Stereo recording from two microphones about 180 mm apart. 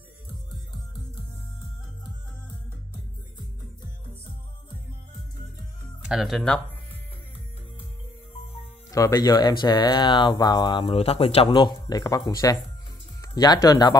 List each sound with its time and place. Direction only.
6.0 s speech: centre (ahead or behind)
8.9 s speech: 20° left (ahead or behind)